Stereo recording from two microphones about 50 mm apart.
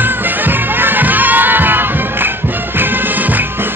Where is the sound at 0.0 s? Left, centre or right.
Right.